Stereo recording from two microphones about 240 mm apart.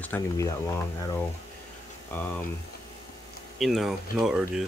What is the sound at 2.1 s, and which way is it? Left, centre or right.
Speech, centre.